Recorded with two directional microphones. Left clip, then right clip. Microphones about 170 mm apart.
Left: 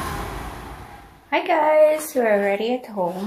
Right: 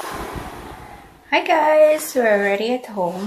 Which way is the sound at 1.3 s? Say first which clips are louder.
Right 2 dB; centre (ahead or behind).